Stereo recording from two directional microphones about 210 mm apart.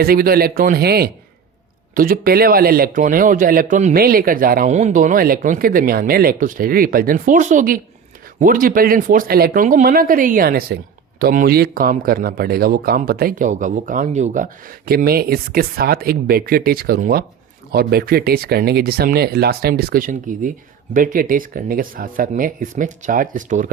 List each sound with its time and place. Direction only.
0.0 s speech: 45° right (ahead or behind)